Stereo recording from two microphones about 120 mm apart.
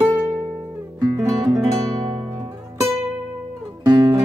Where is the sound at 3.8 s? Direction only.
30° right (ahead or behind).